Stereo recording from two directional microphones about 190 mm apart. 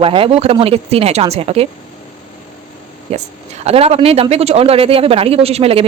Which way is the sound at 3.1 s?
30° right (ahead or behind).